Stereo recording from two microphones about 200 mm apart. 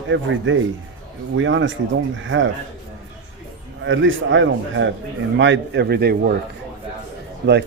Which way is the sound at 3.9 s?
70° right (ahead or behind).